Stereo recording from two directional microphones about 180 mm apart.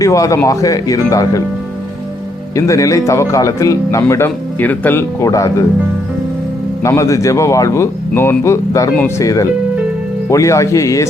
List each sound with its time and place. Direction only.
0.0 s speech: 20° left (ahead or behind)
2.6 s speech: 20° left (ahead or behind)
6.8 s speech: 15° left (ahead or behind)